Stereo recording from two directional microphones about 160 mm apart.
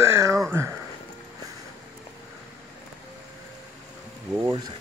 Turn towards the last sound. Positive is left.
turn(degrees=-25)  # may be behind; listen again after turning